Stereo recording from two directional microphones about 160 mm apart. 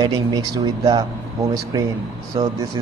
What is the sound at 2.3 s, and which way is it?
Speech, 35° right (ahead or behind).